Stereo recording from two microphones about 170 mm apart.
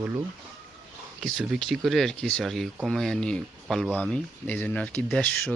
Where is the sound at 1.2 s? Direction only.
Centre (ahead or behind).